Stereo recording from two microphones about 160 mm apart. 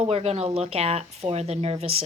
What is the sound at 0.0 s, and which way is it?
Speech, 40° right (ahead or behind).